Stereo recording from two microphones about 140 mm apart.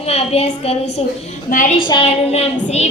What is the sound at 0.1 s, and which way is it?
Speech, 45° left (ahead or behind).